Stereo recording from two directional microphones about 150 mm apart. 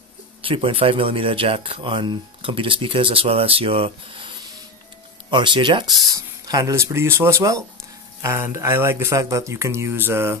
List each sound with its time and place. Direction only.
0.4 s speech: 35° right (ahead or behind)
5.3 s speech: 30° right (ahead or behind); by 10.4 s 15° right (ahead or behind)